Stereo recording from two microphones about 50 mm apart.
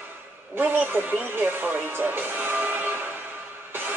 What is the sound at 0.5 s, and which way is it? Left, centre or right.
Speech, right.